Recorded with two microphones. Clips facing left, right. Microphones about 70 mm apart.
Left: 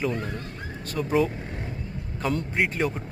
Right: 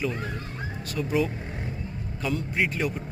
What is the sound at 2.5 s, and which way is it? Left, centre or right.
Speech, left.